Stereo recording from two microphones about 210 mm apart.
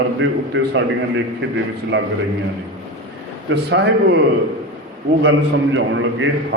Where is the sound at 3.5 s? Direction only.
55° right (ahead or behind).